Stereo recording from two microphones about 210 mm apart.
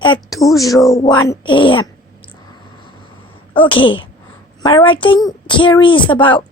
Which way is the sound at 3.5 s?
25° left (ahead or behind).